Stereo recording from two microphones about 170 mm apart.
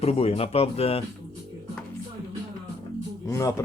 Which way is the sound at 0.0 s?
35° left (ahead or behind).